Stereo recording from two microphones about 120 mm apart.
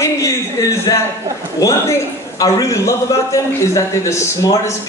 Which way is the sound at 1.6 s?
25° left (ahead or behind).